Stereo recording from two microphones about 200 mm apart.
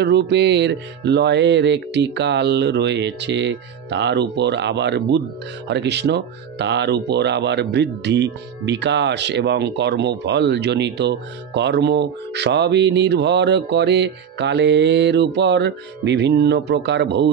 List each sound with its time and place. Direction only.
0.0 s speech: 60° right (ahead or behind)